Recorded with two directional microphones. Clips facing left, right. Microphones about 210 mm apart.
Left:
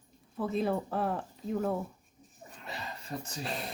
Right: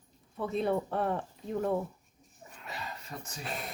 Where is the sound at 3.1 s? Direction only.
30° left (ahead or behind).